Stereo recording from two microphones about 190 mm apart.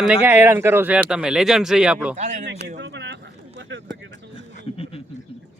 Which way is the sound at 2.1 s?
45° right (ahead or behind).